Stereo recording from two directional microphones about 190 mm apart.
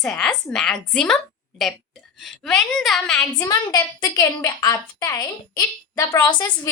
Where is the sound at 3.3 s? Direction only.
20° left (ahead or behind).